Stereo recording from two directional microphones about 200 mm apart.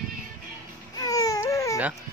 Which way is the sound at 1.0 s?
15° left (ahead or behind).